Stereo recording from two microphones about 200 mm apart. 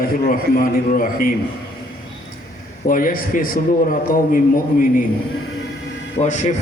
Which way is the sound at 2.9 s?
45° left (ahead or behind).